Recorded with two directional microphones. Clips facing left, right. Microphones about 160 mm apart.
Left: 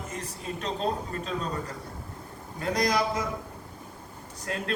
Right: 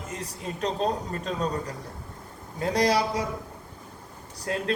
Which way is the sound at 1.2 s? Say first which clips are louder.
Right 6 dB; 35° right (ahead or behind).